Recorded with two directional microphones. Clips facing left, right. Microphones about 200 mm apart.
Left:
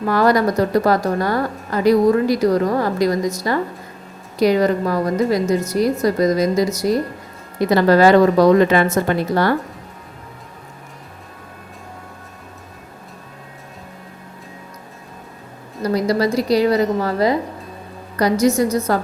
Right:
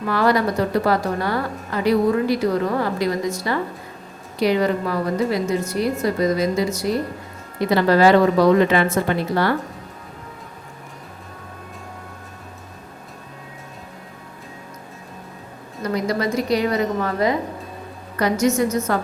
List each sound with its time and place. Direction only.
0.1 s a woman's voice: 45° left (ahead or behind)
15.8 s a woman's voice: 35° left (ahead or behind)